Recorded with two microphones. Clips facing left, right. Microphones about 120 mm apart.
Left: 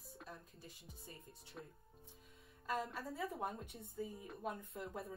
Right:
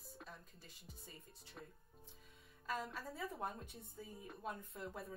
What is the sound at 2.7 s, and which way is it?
A woman's voice, centre (ahead or behind).